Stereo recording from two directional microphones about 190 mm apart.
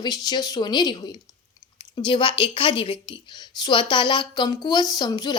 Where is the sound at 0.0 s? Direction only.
20° left (ahead or behind).